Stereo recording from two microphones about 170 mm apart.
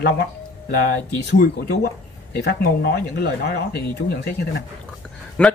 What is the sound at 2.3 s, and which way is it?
Speech, 75° left (ahead or behind).